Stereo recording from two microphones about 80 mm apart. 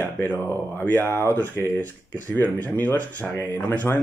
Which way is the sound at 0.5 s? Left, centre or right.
Left.